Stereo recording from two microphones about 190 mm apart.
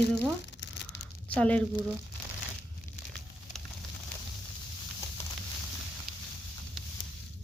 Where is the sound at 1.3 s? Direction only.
5° left (ahead or behind).